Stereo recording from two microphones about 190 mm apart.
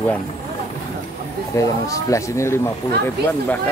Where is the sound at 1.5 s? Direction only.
15° left (ahead or behind).